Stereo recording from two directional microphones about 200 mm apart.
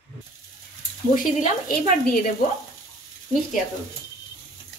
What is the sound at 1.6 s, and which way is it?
Speech, 45° left (ahead or behind).